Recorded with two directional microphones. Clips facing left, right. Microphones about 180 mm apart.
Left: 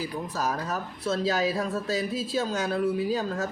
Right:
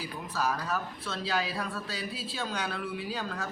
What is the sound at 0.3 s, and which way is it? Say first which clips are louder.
Speech: even; 45° left (ahead or behind).